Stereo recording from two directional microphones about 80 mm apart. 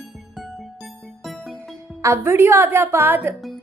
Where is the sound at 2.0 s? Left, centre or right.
Right.